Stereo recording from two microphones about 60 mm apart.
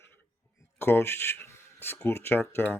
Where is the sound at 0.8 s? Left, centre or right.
Left.